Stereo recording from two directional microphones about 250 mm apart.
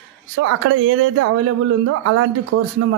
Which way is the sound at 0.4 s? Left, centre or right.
Right.